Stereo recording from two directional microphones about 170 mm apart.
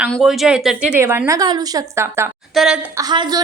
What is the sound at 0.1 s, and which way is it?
A woman's voice, centre (ahead or behind).